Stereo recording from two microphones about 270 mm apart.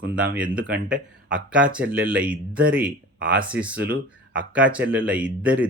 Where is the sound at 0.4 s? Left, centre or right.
Right.